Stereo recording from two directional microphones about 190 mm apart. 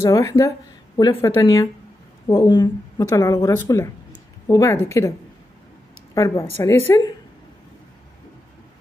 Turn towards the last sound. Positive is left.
turn(degrees=15)  # may be behind; listen again after turning